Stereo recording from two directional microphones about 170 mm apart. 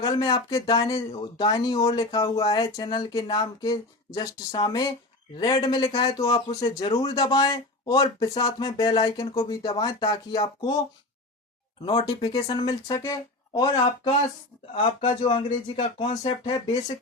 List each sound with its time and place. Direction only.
0.0 s speech: 25° left (ahead or behind)
11.9 s speech: 30° left (ahead or behind)